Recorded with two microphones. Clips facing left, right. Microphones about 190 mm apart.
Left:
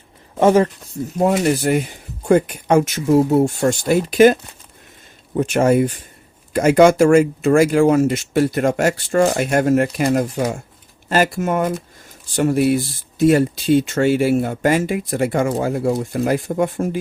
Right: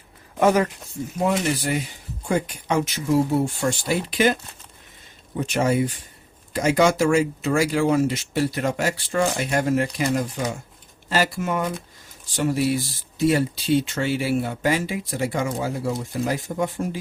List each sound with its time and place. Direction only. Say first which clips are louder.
0.3 s speech: left 5 dB; 30° left (ahead or behind)
1.2 s speech: left 6 dB; 45° left (ahead or behind)
5.4 s speech: left 6 dB; 55° left (ahead or behind)